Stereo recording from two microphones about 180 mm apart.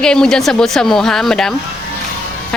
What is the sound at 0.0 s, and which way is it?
Speech, 5° left (ahead or behind).